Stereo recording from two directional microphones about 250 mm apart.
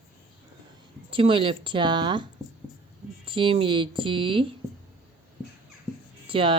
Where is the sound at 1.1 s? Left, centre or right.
Right.